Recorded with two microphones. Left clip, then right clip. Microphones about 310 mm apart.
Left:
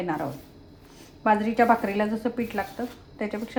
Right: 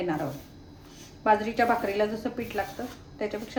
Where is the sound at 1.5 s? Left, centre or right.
Centre.